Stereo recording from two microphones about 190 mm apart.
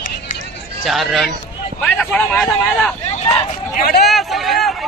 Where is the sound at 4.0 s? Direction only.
Centre (ahead or behind).